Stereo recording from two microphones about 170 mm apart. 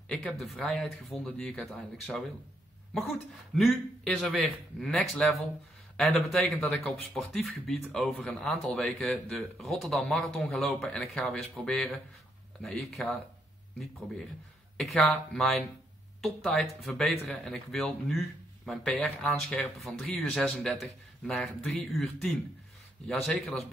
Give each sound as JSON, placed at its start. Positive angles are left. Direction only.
{"t": 0.1, "sound": "speech", "side_deg": 0}
{"t": 14.8, "sound": "speech", "side_deg": 0}
{"t": 23.0, "sound": "speech", "side_deg": 5}